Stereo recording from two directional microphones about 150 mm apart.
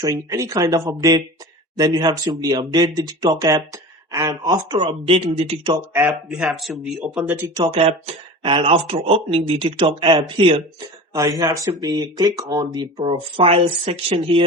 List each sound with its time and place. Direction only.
0.0 s speech: 20° right (ahead or behind); by 5.7 s 40° right (ahead or behind)
5.9 s speech: 10° right (ahead or behind)
7.5 s speech: 35° right (ahead or behind)
11.1 s speech: 25° right (ahead or behind)
13.0 s speech: 40° right (ahead or behind)